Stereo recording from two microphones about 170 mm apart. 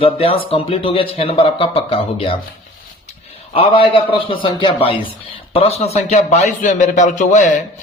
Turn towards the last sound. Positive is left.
turn(degrees=45)  # may be behind; listen again after turning